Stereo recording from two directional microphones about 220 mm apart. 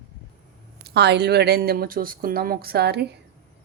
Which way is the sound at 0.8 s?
50° right (ahead or behind).